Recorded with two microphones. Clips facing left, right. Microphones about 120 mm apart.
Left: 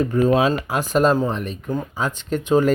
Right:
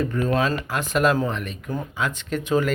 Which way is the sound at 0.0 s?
30° left (ahead or behind).